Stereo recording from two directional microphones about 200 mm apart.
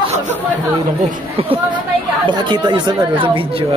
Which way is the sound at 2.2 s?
25° right (ahead or behind).